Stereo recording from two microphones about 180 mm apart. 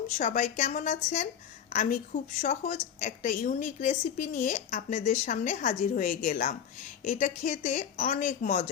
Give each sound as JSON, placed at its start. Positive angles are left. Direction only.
{"t": 0.2, "sound": "a woman's voice", "side_deg": 45}